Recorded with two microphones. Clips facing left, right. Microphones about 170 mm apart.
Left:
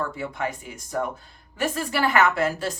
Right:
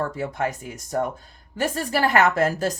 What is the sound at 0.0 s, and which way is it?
A woman's voice, 45° right (ahead or behind).